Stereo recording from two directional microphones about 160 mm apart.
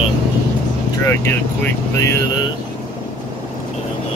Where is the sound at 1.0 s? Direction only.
15° left (ahead or behind).